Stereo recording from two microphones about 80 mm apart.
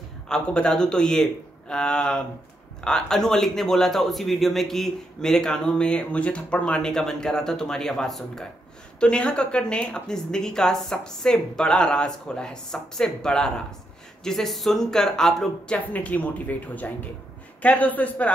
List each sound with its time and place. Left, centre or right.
0.3 s a man's voice: centre
15.9 s speech: centre